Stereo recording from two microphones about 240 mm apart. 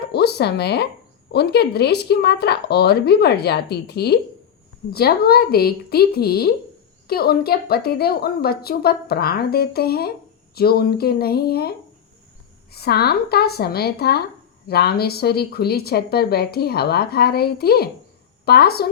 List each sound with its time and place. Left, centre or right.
0.1 s speech: left
12.7 s speech: left